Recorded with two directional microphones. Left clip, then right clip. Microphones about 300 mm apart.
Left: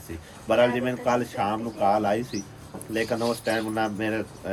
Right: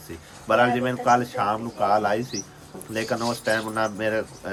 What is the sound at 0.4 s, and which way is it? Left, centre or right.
A man's voice, centre.